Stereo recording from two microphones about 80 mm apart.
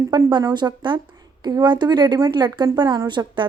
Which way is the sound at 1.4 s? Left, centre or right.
Right.